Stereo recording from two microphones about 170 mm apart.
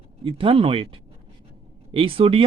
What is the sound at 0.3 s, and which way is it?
Speech, 30° right (ahead or behind).